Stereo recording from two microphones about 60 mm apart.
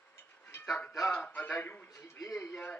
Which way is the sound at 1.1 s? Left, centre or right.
Left.